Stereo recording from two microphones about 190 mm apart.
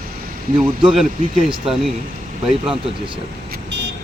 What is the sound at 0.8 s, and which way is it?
Speech, 5° right (ahead or behind).